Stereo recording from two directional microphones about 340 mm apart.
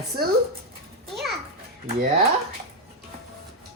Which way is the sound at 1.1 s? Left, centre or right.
Centre.